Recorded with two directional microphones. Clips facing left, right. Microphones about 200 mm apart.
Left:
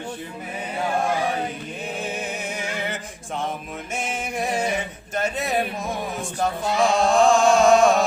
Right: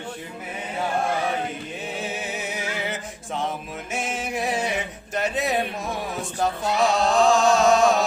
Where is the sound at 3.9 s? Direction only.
Centre (ahead or behind).